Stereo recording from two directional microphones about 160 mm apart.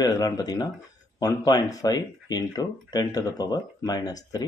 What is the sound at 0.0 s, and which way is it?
Speech, 25° left (ahead or behind).